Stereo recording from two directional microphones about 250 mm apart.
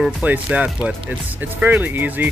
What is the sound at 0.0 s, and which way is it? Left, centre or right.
Speech, centre.